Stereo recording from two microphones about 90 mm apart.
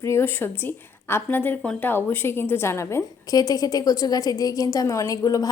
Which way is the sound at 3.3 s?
45° left (ahead or behind).